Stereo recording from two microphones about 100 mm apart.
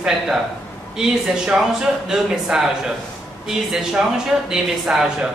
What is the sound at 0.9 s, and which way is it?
A woman's voice, 5° right (ahead or behind).